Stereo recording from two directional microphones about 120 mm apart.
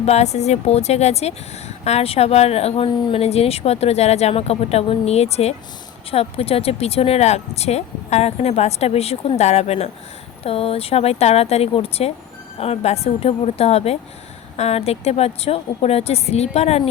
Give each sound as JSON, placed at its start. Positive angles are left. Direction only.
{"t": 0.0, "sound": "speech", "side_deg": 65}